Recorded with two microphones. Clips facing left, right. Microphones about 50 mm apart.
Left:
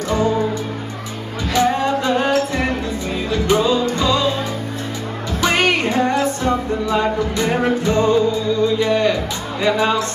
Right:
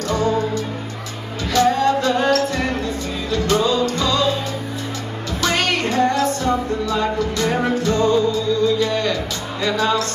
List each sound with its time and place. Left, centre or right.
0.1 s music: centre
1.5 s music: centre
5.4 s music: left